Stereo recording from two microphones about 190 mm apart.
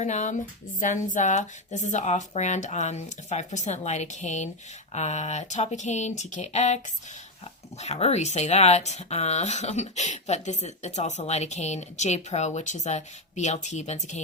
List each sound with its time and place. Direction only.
0.0 s speech: 40° left (ahead or behind)
7.8 s speech: 35° left (ahead or behind)